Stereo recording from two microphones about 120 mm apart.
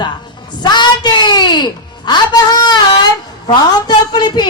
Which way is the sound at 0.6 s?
40° left (ahead or behind).